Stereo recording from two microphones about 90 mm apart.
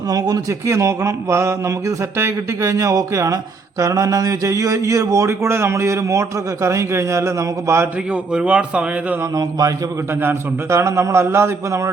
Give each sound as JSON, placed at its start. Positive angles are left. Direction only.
{"t": 0.1, "sound": "a man's voice", "side_deg": -40}
{"t": 8.1, "sound": "a man's voice", "side_deg": -10}
{"t": 9.3, "sound": "a man's voice", "side_deg": -45}
{"t": 10.2, "sound": "a man's voice", "side_deg": -25}